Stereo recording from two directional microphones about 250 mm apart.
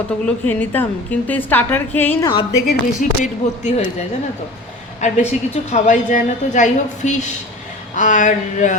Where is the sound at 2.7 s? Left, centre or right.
Left.